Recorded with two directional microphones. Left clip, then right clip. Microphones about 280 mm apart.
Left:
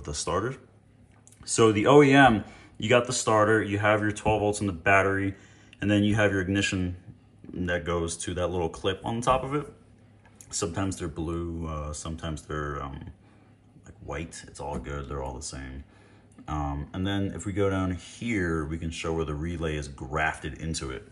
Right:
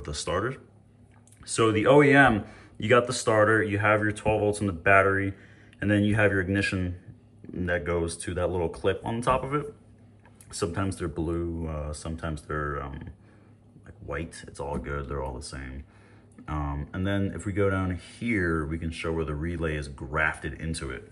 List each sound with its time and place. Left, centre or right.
0.0 s speech: centre